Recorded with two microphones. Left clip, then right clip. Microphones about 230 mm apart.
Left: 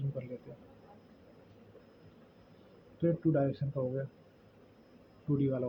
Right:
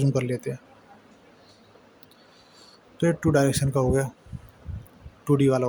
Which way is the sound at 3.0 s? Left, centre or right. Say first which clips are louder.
Right 9 dB; right.